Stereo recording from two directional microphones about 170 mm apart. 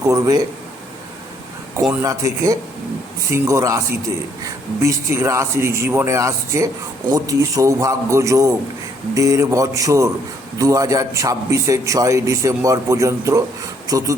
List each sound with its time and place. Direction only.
0.1 s a man's voice: 20° right (ahead or behind)
1.9 s a man's voice: 20° right (ahead or behind)